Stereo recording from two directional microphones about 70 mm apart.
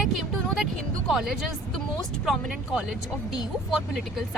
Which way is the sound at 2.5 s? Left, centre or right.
Centre.